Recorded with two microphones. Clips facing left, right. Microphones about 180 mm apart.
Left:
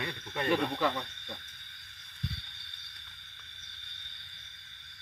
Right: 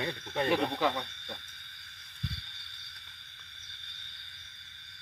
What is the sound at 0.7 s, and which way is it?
Speech, 15° right (ahead or behind).